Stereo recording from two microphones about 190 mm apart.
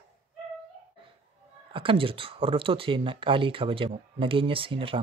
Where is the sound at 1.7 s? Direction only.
25° right (ahead or behind).